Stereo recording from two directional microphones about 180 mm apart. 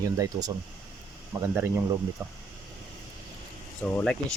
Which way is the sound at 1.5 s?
15° right (ahead or behind).